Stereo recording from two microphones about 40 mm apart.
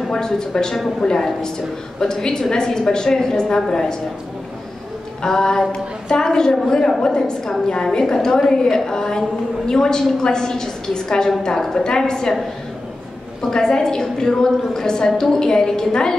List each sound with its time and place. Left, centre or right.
0.1 s a woman's voice: centre
5.2 s a woman's voice: centre
13.4 s a woman's voice: centre